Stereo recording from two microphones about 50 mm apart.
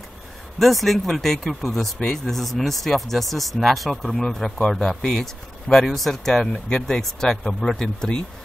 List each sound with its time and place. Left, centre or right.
0.6 s speech: centre